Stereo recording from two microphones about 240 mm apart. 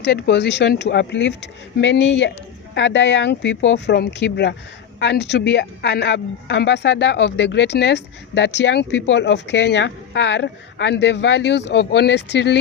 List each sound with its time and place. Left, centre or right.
0.0 s speech: left